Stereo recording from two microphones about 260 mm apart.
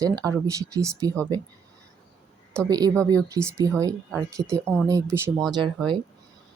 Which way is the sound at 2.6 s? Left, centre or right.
Centre.